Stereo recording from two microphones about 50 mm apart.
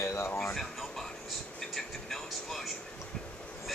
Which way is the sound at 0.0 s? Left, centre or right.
Left.